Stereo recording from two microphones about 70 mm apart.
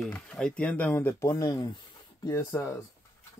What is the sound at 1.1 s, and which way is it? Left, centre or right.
Speech, left.